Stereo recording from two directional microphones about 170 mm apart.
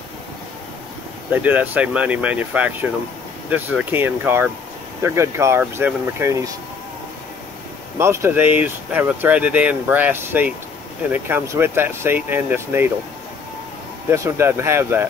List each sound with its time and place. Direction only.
1.3 s speech: 10° right (ahead or behind)
8.0 s speech: 15° right (ahead or behind)
14.1 s speech: 15° right (ahead or behind)